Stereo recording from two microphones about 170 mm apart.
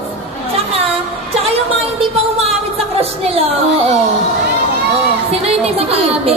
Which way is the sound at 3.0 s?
35° right (ahead or behind).